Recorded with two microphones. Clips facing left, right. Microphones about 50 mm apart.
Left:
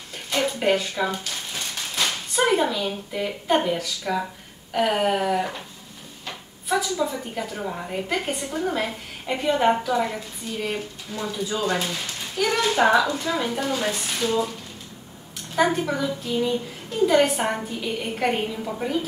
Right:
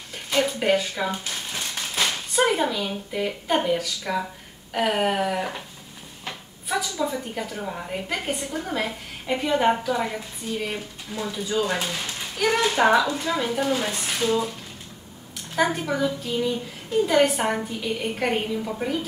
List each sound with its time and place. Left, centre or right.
0.3 s speech: centre
1.2 s a sound: centre
2.0 s a woman's voice: centre
6.7 s a woman's voice: centre
15.5 s a woman's voice: centre